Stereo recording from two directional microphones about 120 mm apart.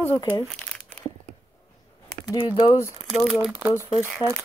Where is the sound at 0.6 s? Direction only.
10° left (ahead or behind).